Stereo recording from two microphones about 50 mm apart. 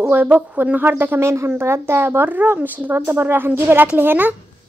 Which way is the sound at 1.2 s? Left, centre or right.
Right.